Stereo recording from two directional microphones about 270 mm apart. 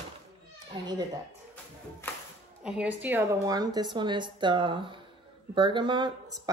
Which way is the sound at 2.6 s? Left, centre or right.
Centre.